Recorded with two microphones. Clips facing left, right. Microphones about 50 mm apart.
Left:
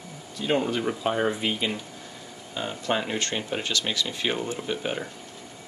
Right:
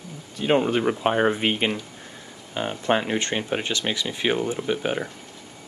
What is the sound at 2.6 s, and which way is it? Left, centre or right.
Speech, right.